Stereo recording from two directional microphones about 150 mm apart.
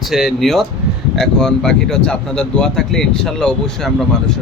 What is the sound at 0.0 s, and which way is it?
A man's voice, centre (ahead or behind).